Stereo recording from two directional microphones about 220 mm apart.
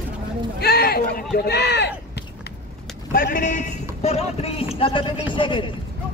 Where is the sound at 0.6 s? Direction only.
45° left (ahead or behind).